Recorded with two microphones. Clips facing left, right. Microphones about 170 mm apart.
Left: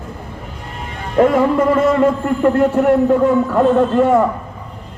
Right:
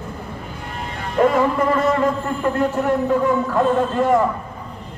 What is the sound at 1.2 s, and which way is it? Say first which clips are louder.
A man's voice: left 4 dB; 60° left (ahead or behind).